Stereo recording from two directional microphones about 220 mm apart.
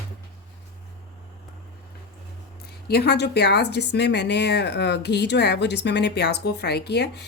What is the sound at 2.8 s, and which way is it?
Speech, 50° left (ahead or behind).